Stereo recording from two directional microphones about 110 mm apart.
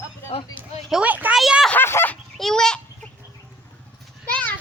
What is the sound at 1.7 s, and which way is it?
Speech, 20° left (ahead or behind).